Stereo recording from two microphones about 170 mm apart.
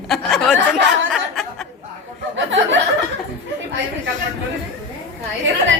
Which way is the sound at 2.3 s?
90° right.